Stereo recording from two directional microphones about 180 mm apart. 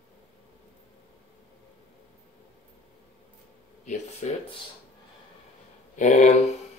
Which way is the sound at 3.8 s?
35° left (ahead or behind).